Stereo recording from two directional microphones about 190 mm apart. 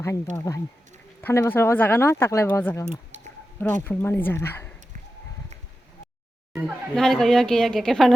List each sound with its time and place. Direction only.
0.3 s speech: 15° left (ahead or behind)
6.5 s speech: centre (ahead or behind)